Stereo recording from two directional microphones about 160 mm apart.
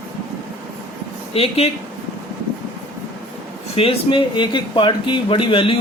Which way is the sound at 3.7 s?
35° left (ahead or behind).